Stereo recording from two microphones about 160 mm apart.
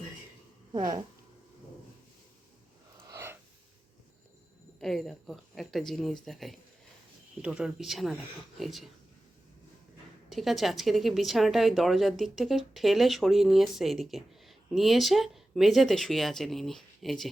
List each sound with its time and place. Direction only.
0.7 s speech: 25° right (ahead or behind)
3.1 s a sound: 15° right (ahead or behind)
4.8 s speech: centre (ahead or behind)
10.2 s speech: centre (ahead or behind)